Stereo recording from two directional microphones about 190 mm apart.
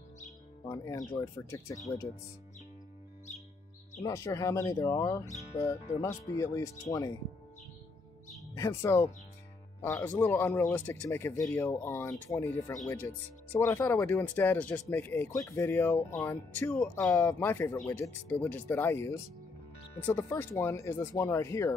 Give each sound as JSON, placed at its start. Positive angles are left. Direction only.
{"t": 0.7, "sound": "speech", "side_deg": 20}
{"t": 4.0, "sound": "speech", "side_deg": 15}
{"t": 5.2, "sound": "speech", "side_deg": 40}
{"t": 5.6, "sound": "speech", "side_deg": 15}
{"t": 8.5, "sound": "speech", "side_deg": 15}